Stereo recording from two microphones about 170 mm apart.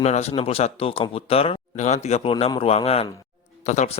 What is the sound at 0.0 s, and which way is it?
A man's voice, 40° left (ahead or behind).